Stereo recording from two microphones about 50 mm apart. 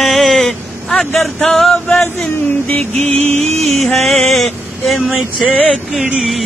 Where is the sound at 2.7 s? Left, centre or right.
Left.